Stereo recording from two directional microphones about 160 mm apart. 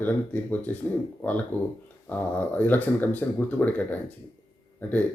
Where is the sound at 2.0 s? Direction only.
10° left (ahead or behind).